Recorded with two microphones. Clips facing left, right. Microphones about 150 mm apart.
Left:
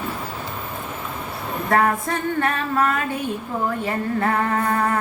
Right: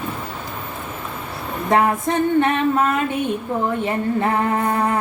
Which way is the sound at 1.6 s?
20° right (ahead or behind).